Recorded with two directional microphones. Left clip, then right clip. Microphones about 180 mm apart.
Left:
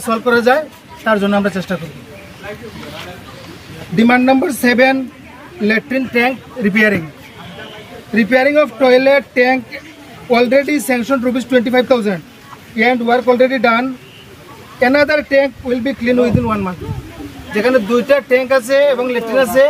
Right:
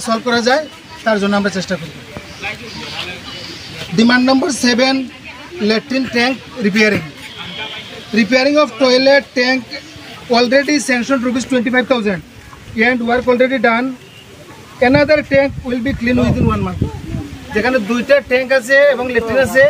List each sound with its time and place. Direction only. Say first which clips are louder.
0.0 s speech: left 2 dB; 40° left (ahead or behind)
1.2 s speech: left 1 dB; 15° left (ahead or behind)
3.9 s speech: left 1 dB; 35° left (ahead or behind)
8.1 s a man's voice: left 1 dB; 40° left (ahead or behind)
11.5 s speech: left 3 dB; 15° left (ahead or behind)